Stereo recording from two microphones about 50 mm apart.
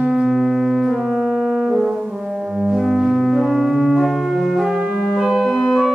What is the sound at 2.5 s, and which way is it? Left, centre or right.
Music, centre.